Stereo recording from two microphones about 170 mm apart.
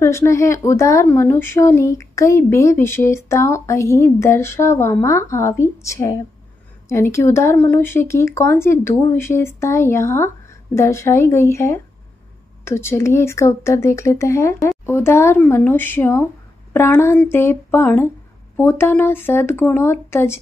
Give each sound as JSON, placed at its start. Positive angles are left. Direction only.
{"t": 0.0, "sound": "speech", "side_deg": 15}